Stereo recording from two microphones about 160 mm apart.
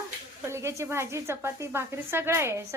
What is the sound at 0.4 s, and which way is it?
A woman's voice, 15° right (ahead or behind).